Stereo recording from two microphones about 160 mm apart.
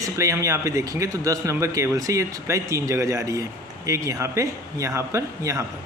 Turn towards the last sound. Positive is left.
turn(degrees=-20)  # may be behind; listen again after turning